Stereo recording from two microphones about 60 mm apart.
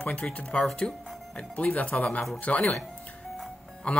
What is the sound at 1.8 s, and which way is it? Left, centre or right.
Speech, left.